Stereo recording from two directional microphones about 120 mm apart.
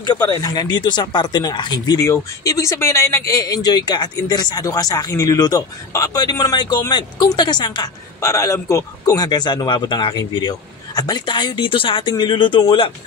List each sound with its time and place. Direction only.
0.0 s speech: 35° left (ahead or behind)